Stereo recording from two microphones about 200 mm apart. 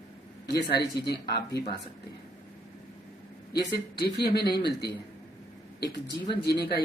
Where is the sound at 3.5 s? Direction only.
55° left (ahead or behind).